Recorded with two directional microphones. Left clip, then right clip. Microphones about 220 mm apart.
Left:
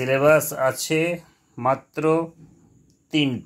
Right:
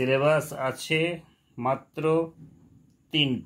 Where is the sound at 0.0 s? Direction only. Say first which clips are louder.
Left 5 dB; 30° left (ahead or behind).